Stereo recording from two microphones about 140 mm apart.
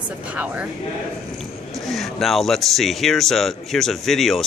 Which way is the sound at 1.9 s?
Centre (ahead or behind).